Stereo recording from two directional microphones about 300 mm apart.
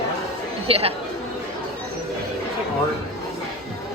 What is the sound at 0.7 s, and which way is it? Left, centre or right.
Speech, centre.